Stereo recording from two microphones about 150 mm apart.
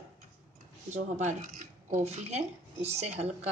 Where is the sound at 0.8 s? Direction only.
50° right (ahead or behind).